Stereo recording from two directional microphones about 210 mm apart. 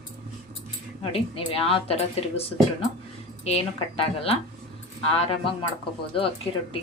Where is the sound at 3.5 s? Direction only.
30° left (ahead or behind).